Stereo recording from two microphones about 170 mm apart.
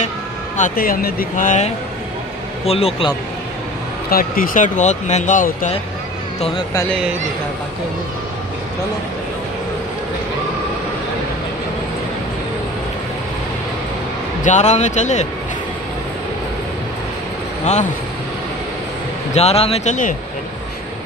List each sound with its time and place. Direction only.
0.6 s speech: 60° left (ahead or behind)
2.6 s speech: 35° left (ahead or behind)
4.1 s speech: 55° left (ahead or behind)
14.4 s speech: 45° left (ahead or behind)
19.3 s speech: 40° left (ahead or behind)